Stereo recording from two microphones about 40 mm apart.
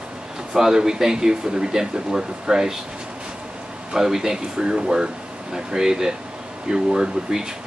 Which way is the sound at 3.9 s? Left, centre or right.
Centre.